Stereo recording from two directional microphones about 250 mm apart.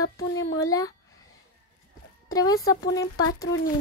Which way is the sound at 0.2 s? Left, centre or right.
Left.